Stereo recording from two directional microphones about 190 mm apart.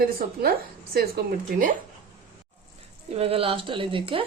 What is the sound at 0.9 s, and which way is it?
Speech, 50° right (ahead or behind).